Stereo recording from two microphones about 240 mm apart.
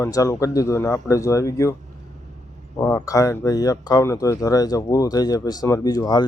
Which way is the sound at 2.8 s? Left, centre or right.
Centre.